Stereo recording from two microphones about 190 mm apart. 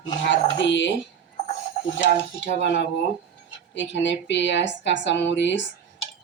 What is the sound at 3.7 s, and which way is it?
Speech, 70° left (ahead or behind).